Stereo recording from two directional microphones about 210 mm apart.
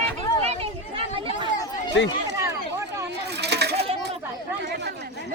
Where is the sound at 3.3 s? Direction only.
55° right (ahead or behind).